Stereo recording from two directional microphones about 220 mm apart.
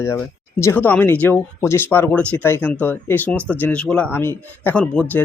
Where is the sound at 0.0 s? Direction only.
10° left (ahead or behind).